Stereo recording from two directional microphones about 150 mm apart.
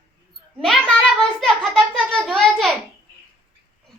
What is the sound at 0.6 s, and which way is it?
A child's voice, 5° left (ahead or behind).